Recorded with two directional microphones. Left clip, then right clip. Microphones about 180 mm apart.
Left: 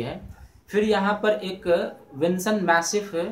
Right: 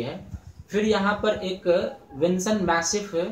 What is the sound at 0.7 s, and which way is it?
Speech, 15° left (ahead or behind).